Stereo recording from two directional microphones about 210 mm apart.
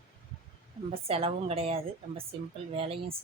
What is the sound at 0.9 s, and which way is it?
A woman's voice, 30° right (ahead or behind).